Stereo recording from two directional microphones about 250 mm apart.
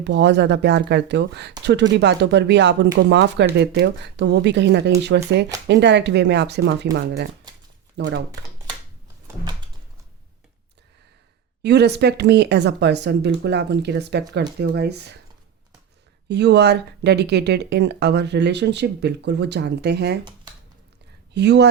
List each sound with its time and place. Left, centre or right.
0.0 s speech: right
7.5 s a sound: centre
7.9 s speech: right
9.2 s a sound: centre
11.6 s speech: right
16.3 s speech: right
21.3 s speech: right